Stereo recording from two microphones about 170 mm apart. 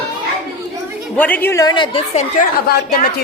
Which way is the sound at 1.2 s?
10° left (ahead or behind).